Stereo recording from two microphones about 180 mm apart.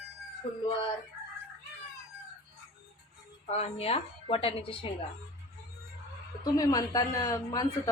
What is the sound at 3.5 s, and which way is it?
A woman's voice, 35° left (ahead or behind).